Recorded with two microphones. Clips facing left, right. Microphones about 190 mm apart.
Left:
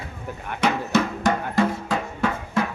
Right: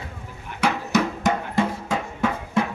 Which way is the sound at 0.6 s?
15° right (ahead or behind).